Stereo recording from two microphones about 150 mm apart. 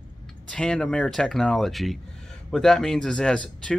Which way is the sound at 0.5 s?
5° left (ahead or behind).